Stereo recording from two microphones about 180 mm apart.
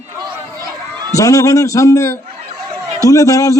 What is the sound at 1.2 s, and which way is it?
A man's voice, 20° left (ahead or behind).